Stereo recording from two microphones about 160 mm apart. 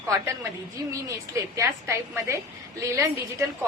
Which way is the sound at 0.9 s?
20° right (ahead or behind).